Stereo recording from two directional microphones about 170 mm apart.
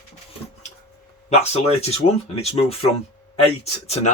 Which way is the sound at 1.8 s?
35° left (ahead or behind).